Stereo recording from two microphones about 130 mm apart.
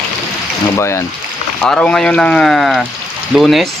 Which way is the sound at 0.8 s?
20° left (ahead or behind).